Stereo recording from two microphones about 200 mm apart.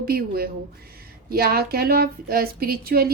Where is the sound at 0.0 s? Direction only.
50° right (ahead or behind).